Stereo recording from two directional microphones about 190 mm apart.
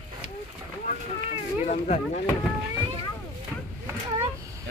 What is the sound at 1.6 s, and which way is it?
Speech, 35° left (ahead or behind).